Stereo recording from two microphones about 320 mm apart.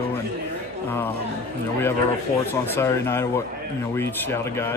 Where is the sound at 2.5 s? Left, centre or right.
Centre.